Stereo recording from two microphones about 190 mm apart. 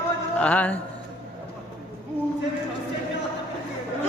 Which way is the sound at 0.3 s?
10° left (ahead or behind).